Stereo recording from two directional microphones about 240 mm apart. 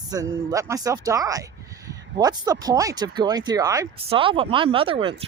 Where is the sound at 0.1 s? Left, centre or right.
Centre.